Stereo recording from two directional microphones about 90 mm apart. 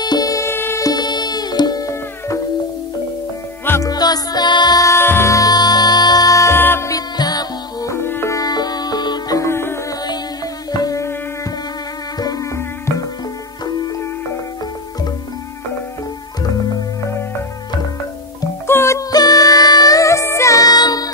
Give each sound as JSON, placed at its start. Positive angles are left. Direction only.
{"t": 0.0, "sound": "music", "side_deg": 45}
{"t": 0.5, "sound": "music", "side_deg": 25}
{"t": 0.8, "sound": "music", "side_deg": 50}
{"t": 3.8, "sound": "music", "side_deg": 45}
{"t": 4.8, "sound": "music", "side_deg": 25}
{"t": 6.9, "sound": "music", "side_deg": 45}
{"t": 7.9, "sound": "music", "side_deg": 25}
{"t": 8.4, "sound": "music", "side_deg": 50}
{"t": 9.4, "sound": "music", "side_deg": 30}
{"t": 9.8, "sound": "music", "side_deg": 50}
{"t": 12.2, "sound": "music", "side_deg": 45}
{"t": 13.7, "sound": "music", "side_deg": 45}
{"t": 18.7, "sound": "music", "side_deg": 30}